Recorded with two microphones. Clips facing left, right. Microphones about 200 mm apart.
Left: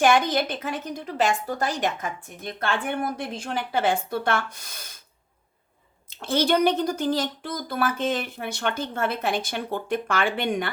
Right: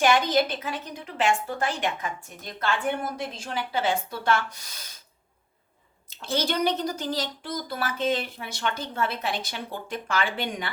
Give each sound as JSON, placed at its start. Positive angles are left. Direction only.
{"t": 0.6, "sound": "a woman's voice", "side_deg": 40}
{"t": 6.1, "sound": "a woman's voice", "side_deg": 55}